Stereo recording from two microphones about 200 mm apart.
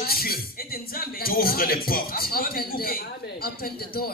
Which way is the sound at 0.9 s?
45° left (ahead or behind).